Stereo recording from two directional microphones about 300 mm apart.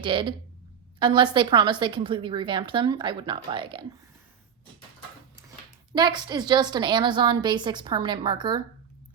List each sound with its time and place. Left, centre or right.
0.0 s a woman's voice: centre
5.9 s a woman's voice: centre